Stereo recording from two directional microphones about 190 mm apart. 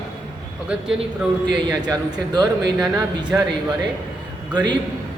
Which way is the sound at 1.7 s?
20° right (ahead or behind).